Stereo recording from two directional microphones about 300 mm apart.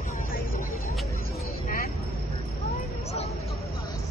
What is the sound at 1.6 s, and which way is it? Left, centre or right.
Vehicle, left.